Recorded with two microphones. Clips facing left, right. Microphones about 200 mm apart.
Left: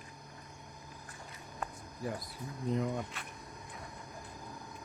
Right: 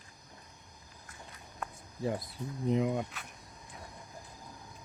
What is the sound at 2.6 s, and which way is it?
Speech, 20° right (ahead or behind).